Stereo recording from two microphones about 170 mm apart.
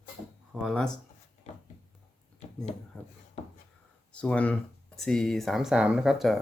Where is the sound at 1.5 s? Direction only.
40° left (ahead or behind).